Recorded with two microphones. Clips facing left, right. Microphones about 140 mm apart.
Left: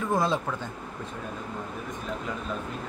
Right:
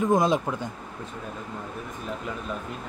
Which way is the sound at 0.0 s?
20° right (ahead or behind).